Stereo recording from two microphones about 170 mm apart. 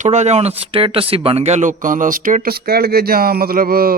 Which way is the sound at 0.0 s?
45° right (ahead or behind).